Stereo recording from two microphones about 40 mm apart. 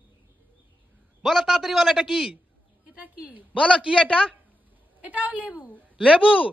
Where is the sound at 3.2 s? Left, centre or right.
Right.